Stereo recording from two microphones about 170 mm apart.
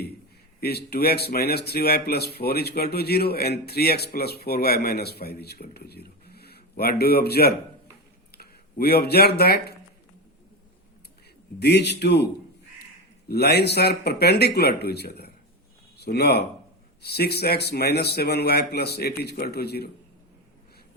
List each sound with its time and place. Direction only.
0.6 s speech: 70° left (ahead or behind)
11.6 s a man's voice: 75° left (ahead or behind)
13.2 s speech: 70° left (ahead or behind)